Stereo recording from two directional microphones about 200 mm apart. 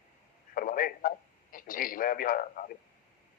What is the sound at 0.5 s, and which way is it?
A man's voice, 45° left (ahead or behind).